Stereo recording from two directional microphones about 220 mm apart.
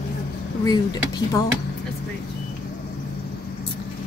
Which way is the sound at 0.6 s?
15° left (ahead or behind).